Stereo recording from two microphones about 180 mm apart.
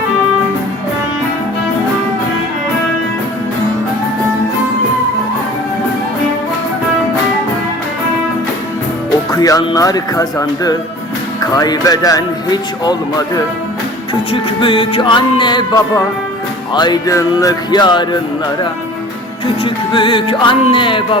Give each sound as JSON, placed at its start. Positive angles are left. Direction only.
{"t": 9.3, "sound": "speech", "side_deg": 20}
{"t": 19.6, "sound": "speech", "side_deg": 25}